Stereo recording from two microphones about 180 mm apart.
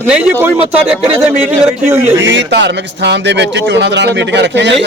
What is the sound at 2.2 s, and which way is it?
A man's voice, 80° right.